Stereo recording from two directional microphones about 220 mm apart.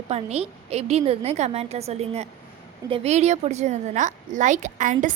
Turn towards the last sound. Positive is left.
turn(degrees=-35)  # may be behind; listen again after turning